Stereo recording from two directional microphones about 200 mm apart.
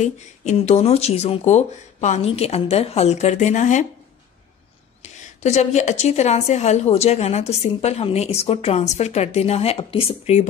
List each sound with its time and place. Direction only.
0.0 s a woman's voice: 35° left (ahead or behind)
5.0 s a woman's voice: 35° left (ahead or behind)